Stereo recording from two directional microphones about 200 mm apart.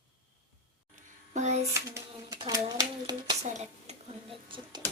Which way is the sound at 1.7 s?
15° right (ahead or behind).